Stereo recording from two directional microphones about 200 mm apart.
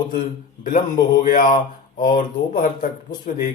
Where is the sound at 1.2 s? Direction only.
45° left (ahead or behind).